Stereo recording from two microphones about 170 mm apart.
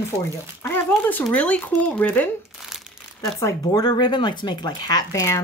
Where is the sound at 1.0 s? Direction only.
10° left (ahead or behind).